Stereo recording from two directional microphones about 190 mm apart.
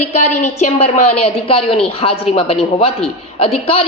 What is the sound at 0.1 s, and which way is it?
A woman's voice, 40° left (ahead or behind).